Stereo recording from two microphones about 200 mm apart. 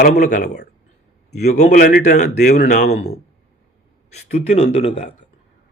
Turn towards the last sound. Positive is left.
turn(degrees=30)  # may be behind; listen again after turning